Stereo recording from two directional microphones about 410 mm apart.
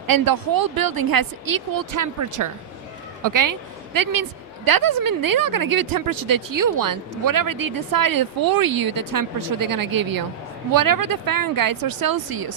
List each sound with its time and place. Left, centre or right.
0.1 s a woman's voice: right